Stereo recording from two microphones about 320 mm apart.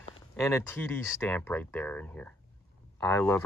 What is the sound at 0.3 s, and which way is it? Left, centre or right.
Speech, centre.